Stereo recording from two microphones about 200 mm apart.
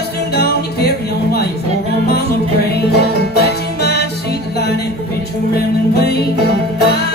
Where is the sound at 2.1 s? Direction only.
55° left (ahead or behind).